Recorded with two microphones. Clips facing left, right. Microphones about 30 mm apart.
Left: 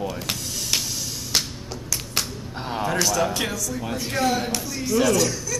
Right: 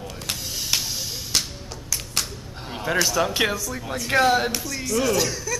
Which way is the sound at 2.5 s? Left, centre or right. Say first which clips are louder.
Left 7 dB; centre.